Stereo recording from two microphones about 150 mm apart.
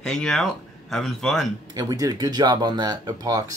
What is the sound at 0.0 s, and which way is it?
Speech, 5° left (ahead or behind).